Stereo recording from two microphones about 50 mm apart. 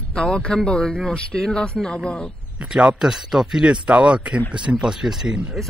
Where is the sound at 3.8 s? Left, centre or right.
Right.